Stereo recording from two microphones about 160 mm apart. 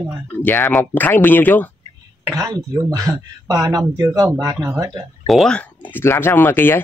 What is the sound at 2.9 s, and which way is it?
Speech, 20° right (ahead or behind).